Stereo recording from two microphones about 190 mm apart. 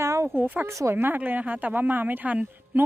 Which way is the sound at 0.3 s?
10° right (ahead or behind).